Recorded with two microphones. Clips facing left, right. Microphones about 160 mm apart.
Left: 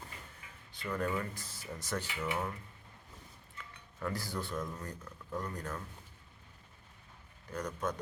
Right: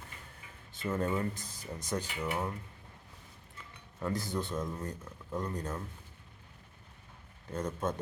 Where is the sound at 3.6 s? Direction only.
20° right (ahead or behind).